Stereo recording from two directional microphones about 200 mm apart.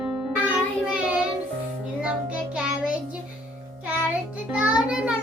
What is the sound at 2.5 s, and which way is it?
Child singing, 5° right (ahead or behind).